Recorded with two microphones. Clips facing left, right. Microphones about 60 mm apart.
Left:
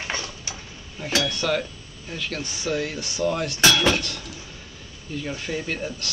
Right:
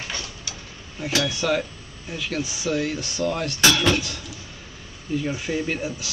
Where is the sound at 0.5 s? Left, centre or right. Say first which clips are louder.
Left 1 dB; left.